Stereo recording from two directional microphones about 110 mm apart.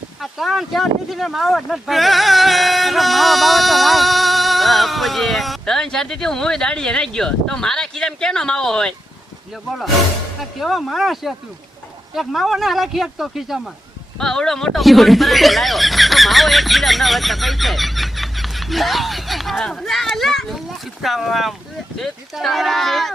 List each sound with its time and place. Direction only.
0.2 s speech: centre (ahead or behind)
10.6 s speech: centre (ahead or behind)